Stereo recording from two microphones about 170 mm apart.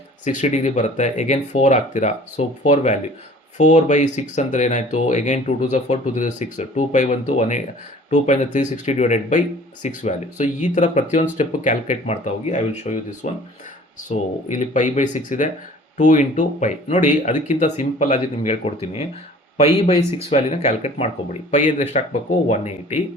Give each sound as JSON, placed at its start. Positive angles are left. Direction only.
{"t": 0.3, "sound": "speech", "side_deg": 45}